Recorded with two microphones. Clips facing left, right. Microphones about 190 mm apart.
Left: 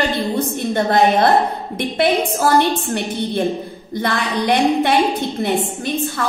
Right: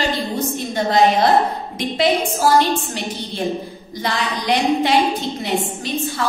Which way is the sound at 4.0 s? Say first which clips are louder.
Left 3 dB; 55° left (ahead or behind).